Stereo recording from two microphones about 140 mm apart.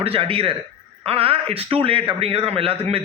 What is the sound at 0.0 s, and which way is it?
A man's voice, 45° right (ahead or behind).